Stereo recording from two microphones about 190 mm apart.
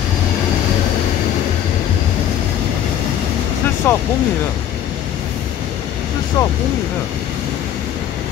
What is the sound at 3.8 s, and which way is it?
Speech, 10° left (ahead or behind).